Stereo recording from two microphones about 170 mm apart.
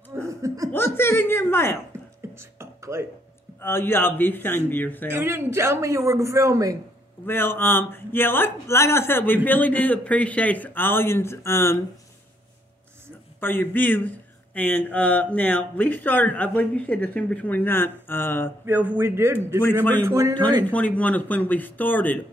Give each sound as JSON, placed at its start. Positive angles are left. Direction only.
{"t": 0.1, "sound": "laughter", "side_deg": -15}
{"t": 0.7, "sound": "speech", "side_deg": 15}
{"t": 1.9, "sound": "a sound", "side_deg": -15}
{"t": 3.6, "sound": "speech", "side_deg": 15}
{"t": 5.1, "sound": "a man's voice", "side_deg": -15}
{"t": 7.2, "sound": "speech", "side_deg": 15}
{"t": 13.4, "sound": "speech", "side_deg": 10}
{"t": 18.7, "sound": "a man's voice", "side_deg": -10}
{"t": 19.6, "sound": "speech", "side_deg": 10}
{"t": 20.1, "sound": "speech", "side_deg": -20}
{"t": 20.6, "sound": "speech", "side_deg": 10}